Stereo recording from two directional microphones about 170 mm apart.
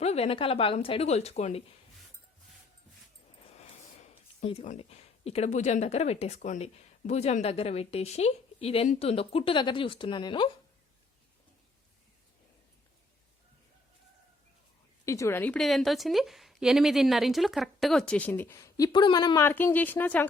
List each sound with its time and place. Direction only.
0.0 s speech: 40° left (ahead or behind)
3.6 s a sound: 40° left (ahead or behind)
4.7 s speech: 35° left (ahead or behind)
15.0 s a woman's voice: 15° left (ahead or behind)
19.4 s speech: 15° left (ahead or behind)